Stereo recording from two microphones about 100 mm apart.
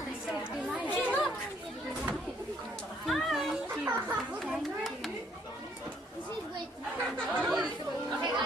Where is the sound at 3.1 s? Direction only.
Centre (ahead or behind).